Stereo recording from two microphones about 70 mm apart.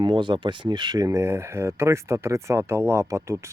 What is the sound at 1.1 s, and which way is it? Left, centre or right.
Speech, right.